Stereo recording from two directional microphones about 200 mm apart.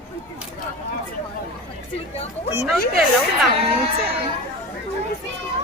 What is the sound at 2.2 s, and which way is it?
Speech, 30° left (ahead or behind).